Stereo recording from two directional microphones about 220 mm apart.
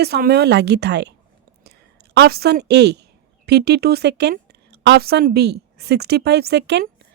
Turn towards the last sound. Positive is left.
turn(degrees=-50)  # may be behind; listen again after turning